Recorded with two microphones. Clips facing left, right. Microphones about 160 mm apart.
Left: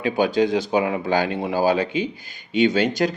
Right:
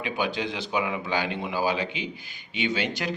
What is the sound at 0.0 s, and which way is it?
Speech, 40° left (ahead or behind).